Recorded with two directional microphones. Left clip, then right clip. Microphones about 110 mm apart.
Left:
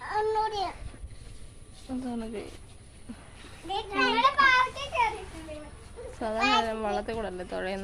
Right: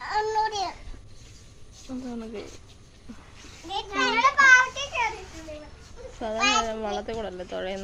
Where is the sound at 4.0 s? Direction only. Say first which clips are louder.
Right 2 dB; 25° right (ahead or behind).